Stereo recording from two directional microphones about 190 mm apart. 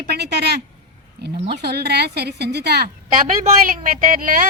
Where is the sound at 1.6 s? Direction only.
60° right (ahead or behind).